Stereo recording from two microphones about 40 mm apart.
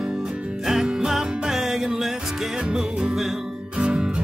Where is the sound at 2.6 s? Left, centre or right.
Right.